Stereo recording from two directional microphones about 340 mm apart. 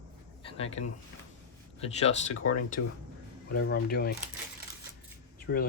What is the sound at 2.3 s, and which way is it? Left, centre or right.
Speech, left.